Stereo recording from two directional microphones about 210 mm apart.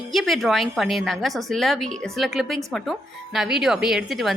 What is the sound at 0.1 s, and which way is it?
A woman's voice, centre (ahead or behind).